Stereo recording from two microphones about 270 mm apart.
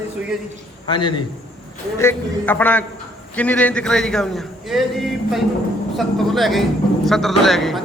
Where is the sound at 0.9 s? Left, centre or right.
Centre.